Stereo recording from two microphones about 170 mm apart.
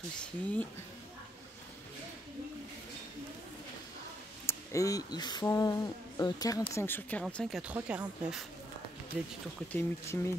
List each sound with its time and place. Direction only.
0.2 s speech: 10° left (ahead or behind)
4.5 s speech: 20° left (ahead or behind); by 9.3 s 5° right (ahead or behind)
9.7 s speech: 15° left (ahead or behind)